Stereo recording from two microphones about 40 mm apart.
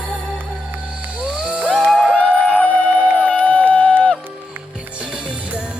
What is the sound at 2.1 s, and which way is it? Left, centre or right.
Music, left.